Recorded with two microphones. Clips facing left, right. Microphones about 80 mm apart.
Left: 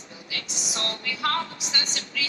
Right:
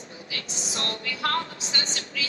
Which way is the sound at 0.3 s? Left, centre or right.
Right.